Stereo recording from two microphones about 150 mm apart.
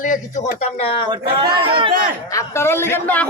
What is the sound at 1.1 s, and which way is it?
Speech, 35° right (ahead or behind).